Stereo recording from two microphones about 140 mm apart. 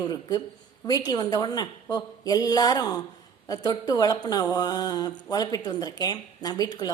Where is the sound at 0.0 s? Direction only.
25° left (ahead or behind).